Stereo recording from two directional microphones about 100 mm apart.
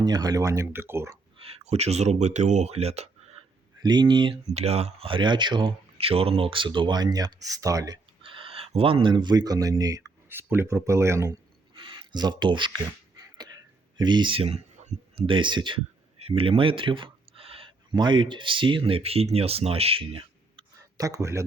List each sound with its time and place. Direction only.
0.0 s speech: 40° right (ahead or behind)
1.4 s speech: 80° right
2.6 s a sound: 90° right
3.8 s speech: 45° right (ahead or behind)
4.5 s speech: 90° right; by 5.7 s 50° right (ahead or behind)
6.0 s speech: 80° right; by 7.9 s 35° right (ahead or behind)
8.2 s speech: 65° right (ahead or behind); by 10.0 s 35° right (ahead or behind)
10.2 s speech: 20° right (ahead or behind)
11.7 s a sound: 50° right (ahead or behind)
14.0 s speech: 50° right (ahead or behind); by 14.6 s 70° right (ahead or behind)
15.1 s speech: 55° right (ahead or behind)
16.2 s a sound: 70° right (ahead or behind)
17.9 s speech: 50° right (ahead or behind); by 20.7 s 65° right (ahead or behind)
21.0 s speech: 35° right (ahead or behind)